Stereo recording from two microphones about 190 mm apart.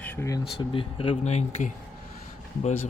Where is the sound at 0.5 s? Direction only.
30° left (ahead or behind).